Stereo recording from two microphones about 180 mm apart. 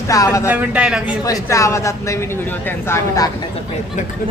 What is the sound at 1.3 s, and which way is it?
Speech, 15° left (ahead or behind).